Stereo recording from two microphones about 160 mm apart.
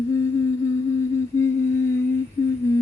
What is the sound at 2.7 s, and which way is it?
Humming, 20° left (ahead or behind).